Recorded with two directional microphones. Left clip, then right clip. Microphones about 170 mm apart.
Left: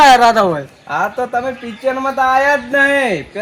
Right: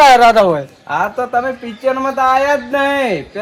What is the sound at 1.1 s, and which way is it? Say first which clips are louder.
Speech: right 2 dB; centre (ahead or behind).